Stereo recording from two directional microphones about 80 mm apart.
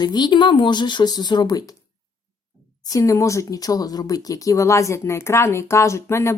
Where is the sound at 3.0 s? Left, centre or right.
Left.